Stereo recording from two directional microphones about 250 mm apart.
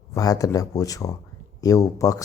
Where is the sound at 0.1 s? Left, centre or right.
Centre.